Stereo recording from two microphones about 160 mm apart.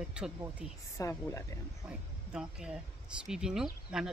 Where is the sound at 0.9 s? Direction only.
20° left (ahead or behind).